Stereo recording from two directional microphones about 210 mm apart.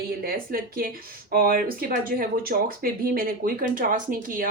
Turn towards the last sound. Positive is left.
turn(degrees=-40)  # may be behind; listen again after turning